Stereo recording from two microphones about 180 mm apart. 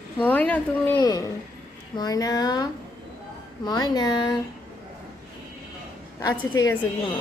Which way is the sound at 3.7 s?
20° left (ahead or behind).